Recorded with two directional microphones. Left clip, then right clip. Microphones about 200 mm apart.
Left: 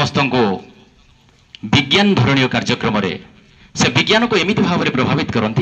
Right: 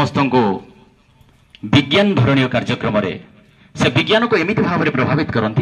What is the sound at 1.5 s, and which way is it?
A man's voice, 45° left (ahead or behind).